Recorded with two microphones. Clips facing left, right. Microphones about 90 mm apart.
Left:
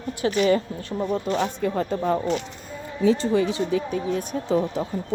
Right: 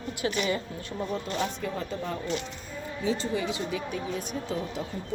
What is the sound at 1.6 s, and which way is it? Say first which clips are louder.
Speech: left 9 dB; 50° left (ahead or behind).